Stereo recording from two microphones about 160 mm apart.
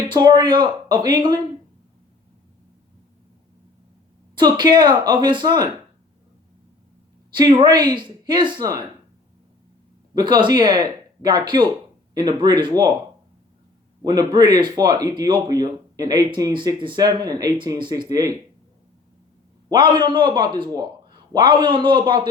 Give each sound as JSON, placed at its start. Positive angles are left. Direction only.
{"t": 0.1, "sound": "speech", "side_deg": -25}
{"t": 4.4, "sound": "speech", "side_deg": -30}
{"t": 7.3, "sound": "speech", "side_deg": -30}
{"t": 10.2, "sound": "speech", "side_deg": -30}
{"t": 14.0, "sound": "speech", "side_deg": -25}
{"t": 19.7, "sound": "a man's voice", "side_deg": -30}